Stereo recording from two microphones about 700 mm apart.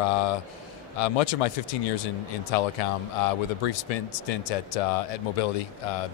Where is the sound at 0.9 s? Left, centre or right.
Left.